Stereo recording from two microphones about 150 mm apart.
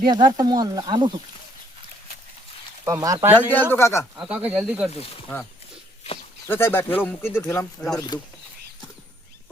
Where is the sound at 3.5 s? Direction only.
15° left (ahead or behind).